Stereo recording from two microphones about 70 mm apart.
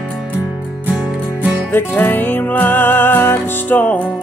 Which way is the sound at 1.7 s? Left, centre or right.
Left.